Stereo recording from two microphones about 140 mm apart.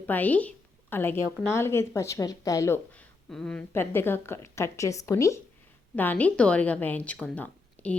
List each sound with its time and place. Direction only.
0.0 s a woman's voice: 10° left (ahead or behind)